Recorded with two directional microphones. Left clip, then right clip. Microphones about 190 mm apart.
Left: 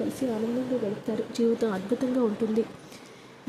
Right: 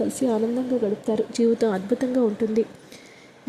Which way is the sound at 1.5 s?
25° right (ahead or behind).